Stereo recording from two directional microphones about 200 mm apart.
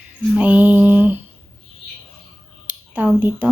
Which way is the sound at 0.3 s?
5° right (ahead or behind).